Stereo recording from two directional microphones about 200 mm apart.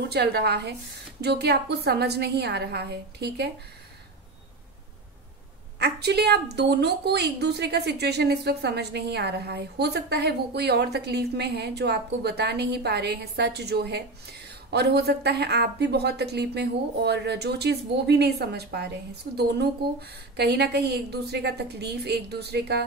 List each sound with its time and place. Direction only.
0.1 s a woman's voice: 55° right (ahead or behind)
5.8 s a woman's voice: 55° right (ahead or behind)